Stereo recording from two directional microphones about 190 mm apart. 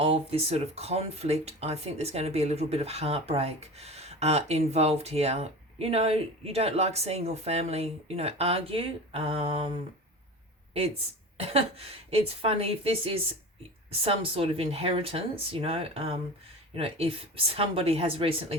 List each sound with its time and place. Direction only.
0.0 s speech: 30° right (ahead or behind)
10.8 s a woman's voice: 30° right (ahead or behind)